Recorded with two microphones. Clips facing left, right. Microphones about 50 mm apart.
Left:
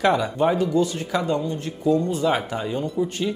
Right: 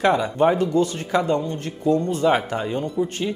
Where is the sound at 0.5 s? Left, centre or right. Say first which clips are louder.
Right 1 dB; right.